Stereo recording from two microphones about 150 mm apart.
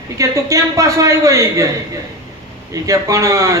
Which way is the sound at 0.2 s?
20° right (ahead or behind).